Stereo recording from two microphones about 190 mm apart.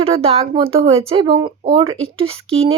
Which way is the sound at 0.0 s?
30° right (ahead or behind).